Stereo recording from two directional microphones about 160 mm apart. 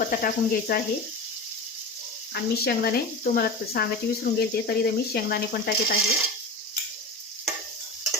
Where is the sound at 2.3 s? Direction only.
75° left (ahead or behind).